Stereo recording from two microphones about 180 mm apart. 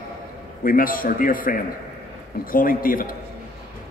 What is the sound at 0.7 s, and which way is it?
A man's voice, 50° left (ahead or behind).